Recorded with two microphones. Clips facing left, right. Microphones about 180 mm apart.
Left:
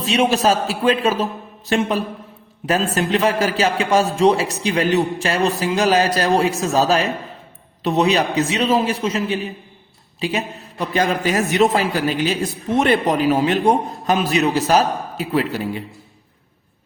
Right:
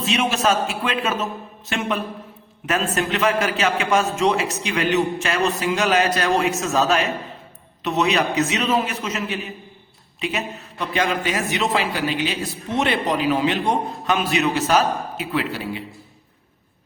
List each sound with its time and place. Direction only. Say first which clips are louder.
0.0 s a man's voice: left 4 dB; 35° left (ahead or behind)